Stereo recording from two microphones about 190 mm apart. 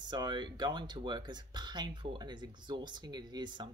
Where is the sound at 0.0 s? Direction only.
25° right (ahead or behind).